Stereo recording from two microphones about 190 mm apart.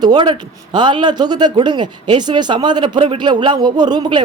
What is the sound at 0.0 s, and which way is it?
Speech, 20° right (ahead or behind).